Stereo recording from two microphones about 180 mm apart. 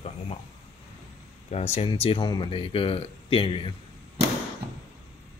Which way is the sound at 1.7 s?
30° left (ahead or behind).